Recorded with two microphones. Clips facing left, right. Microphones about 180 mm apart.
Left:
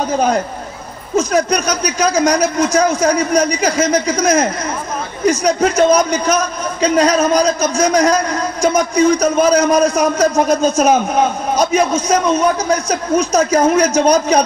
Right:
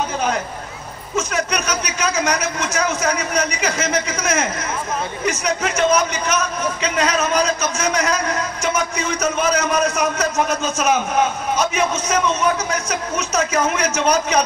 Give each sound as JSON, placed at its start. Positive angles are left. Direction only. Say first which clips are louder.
{"t": 1.1, "sound": "a man's voice", "louder": "left 7 dB", "side_deg": 35}